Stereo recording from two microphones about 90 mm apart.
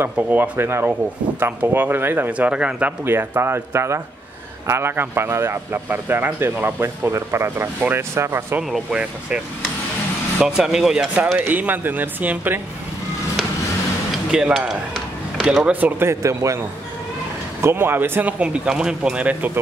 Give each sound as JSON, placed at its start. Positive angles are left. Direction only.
{"t": 0.0, "sound": "a man's voice", "side_deg": -25}
{"t": 3.1, "sound": "a man's voice", "side_deg": -25}
{"t": 10.4, "sound": "speech", "side_deg": -5}
{"t": 11.4, "sound": "a man's voice", "side_deg": -20}
{"t": 14.3, "sound": "speech", "side_deg": -10}
{"t": 15.7, "sound": "a man's voice", "side_deg": -25}
{"t": 18.4, "sound": "speech", "side_deg": -10}